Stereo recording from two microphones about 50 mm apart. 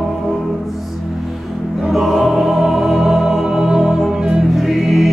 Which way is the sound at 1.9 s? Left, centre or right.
Centre.